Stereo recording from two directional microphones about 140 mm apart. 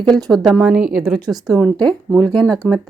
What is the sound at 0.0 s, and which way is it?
Speech, 30° right (ahead or behind).